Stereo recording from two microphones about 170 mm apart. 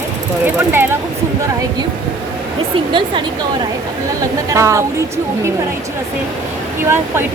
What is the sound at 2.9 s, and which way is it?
Speech, 25° right (ahead or behind).